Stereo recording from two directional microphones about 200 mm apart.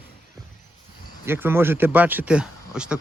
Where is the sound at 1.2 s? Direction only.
10° right (ahead or behind).